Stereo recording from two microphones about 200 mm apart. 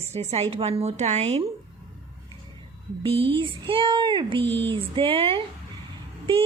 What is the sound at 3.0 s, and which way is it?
A woman's voice, 25° right (ahead or behind).